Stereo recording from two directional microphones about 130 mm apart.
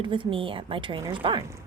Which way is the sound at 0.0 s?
40° right (ahead or behind).